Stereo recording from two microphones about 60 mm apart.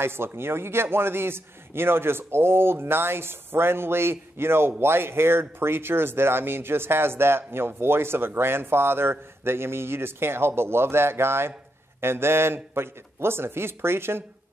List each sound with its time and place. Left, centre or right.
0.0 s a man's voice: right